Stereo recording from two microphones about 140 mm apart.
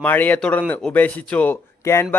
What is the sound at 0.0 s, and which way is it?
Speech, 15° left (ahead or behind).